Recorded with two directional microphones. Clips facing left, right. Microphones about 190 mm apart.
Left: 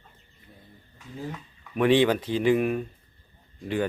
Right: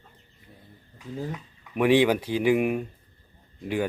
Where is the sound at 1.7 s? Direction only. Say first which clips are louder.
Even; 10° right (ahead or behind).